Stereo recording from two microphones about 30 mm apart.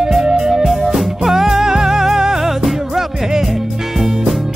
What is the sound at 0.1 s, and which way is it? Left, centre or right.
Music, centre.